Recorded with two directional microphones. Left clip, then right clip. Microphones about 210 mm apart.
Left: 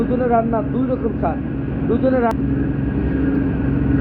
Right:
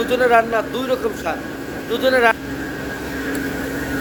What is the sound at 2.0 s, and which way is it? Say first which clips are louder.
Speech: right 4 dB; 40° right (ahead or behind).